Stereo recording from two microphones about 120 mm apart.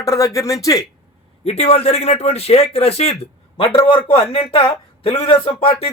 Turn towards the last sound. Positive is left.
turn(degrees=55)  # may be behind; listen again after turning